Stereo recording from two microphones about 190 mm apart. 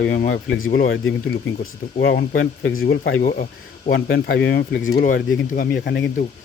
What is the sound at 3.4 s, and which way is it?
Speech, 45° left (ahead or behind).